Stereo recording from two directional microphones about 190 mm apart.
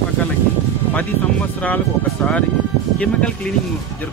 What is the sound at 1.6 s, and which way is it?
Speech, 5° left (ahead or behind).